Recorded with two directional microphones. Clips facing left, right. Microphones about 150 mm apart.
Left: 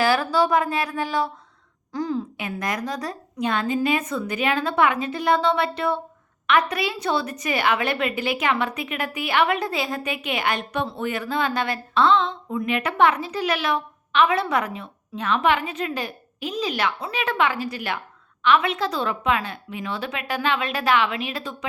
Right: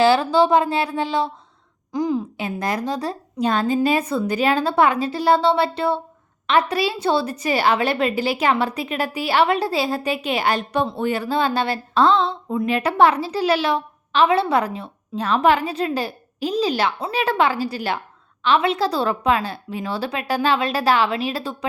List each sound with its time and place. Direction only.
0.0 s speech: 25° right (ahead or behind)
1.9 s a sound: 15° right (ahead or behind)
2.4 s a woman's voice: 30° right (ahead or behind)